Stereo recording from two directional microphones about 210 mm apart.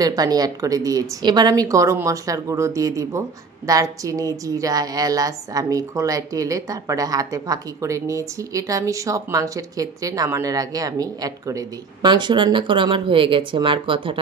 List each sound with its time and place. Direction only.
0.0 s a woman's voice: 20° right (ahead or behind)